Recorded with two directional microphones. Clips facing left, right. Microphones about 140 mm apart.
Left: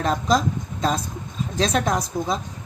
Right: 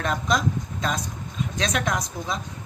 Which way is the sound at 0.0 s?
30° left (ahead or behind).